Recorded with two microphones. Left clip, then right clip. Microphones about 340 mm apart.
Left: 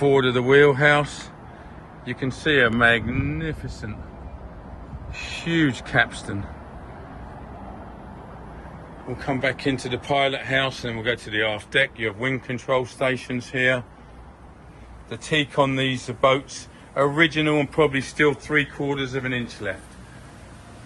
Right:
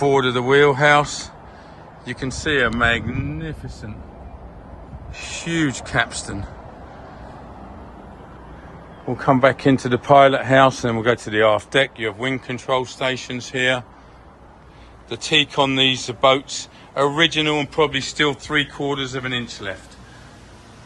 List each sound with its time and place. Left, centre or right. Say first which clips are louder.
0.0 s speech: right 2 dB; centre
5.5 s speech: even; centre
9.2 s speech: right 9 dB; right; by 13.8 s centre
15.1 s speech: right 5 dB; centre